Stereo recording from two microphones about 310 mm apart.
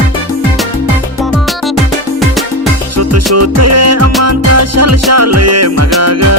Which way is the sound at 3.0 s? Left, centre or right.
Right.